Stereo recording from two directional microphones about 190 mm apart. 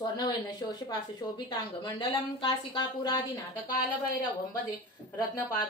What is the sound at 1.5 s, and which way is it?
A woman's voice, 25° left (ahead or behind).